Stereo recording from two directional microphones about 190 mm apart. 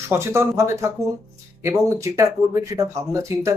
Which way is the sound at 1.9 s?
15° right (ahead or behind).